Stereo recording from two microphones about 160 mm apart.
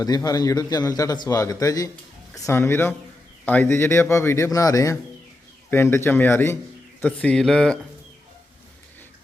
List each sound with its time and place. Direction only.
0.0 s a man's voice: 25° left (ahead or behind); by 7.8 s 5° left (ahead or behind)